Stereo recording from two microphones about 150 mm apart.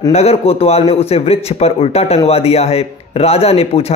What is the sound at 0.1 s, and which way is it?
A man's voice, 45° left (ahead or behind).